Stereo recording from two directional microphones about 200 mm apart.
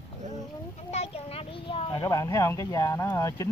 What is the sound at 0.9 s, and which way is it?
A child's voice, 30° left (ahead or behind).